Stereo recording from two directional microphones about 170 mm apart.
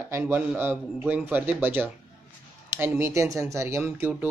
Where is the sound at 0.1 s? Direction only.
15° right (ahead or behind).